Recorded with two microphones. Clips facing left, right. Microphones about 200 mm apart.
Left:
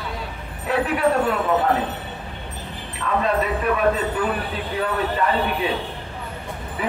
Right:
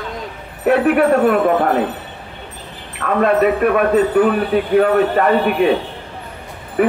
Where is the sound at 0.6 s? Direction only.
60° right (ahead or behind).